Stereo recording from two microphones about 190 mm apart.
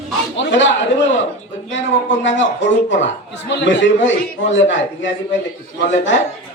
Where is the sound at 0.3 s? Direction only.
75° left (ahead or behind).